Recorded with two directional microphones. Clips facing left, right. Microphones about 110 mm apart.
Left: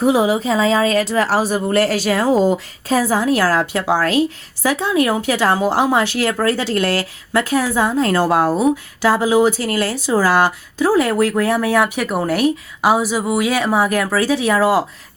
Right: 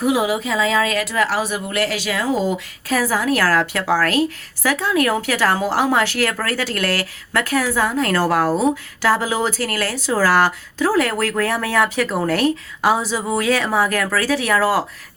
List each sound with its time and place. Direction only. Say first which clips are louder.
0.0 s speech: left 4 dB; 30° left (ahead or behind)
2.9 s a woman's voice: left 3 dB; 25° left (ahead or behind)